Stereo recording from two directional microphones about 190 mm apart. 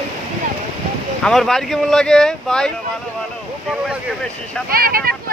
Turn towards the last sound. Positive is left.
turn(degrees=-50)  # may be behind; listen again after turning